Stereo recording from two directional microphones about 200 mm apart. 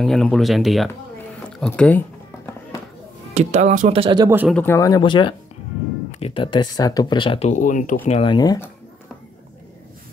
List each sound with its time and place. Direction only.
0.0 s speech: centre (ahead or behind)
3.3 s speech: 35° right (ahead or behind)
4.5 s speech: 10° left (ahead or behind); by 8.0 s 40° left (ahead or behind)
8.1 s speech: 25° left (ahead or behind)